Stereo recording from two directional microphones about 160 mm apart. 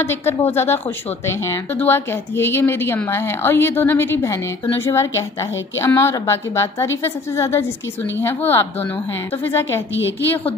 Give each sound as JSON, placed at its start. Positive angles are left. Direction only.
{"t": 0.0, "sound": "speech", "side_deg": 15}